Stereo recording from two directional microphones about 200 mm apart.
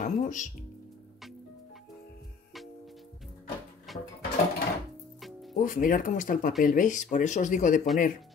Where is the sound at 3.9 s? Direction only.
Centre (ahead or behind).